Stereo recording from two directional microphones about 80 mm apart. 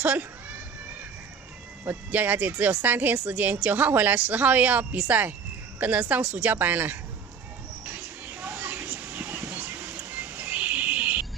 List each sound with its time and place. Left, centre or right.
0.0 s a woman's voice: right
1.9 s a woman's voice: right
7.8 s a sound: right